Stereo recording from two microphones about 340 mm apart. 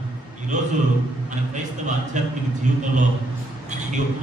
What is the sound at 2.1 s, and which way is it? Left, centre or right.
Speech, right.